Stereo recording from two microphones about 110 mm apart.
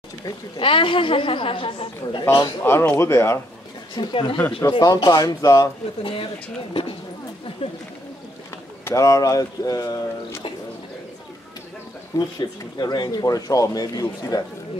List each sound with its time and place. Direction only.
0.6 s a woman's voice: 50° left (ahead or behind)
2.6 s speech: 25° left (ahead or behind)
3.9 s a woman's voice: 45° left (ahead or behind)
4.6 s speech: 35° left (ahead or behind)
6.7 s a woman's voice: 55° left (ahead or behind)
8.8 s speech: 30° left (ahead or behind)
12.2 s speech: 40° left (ahead or behind)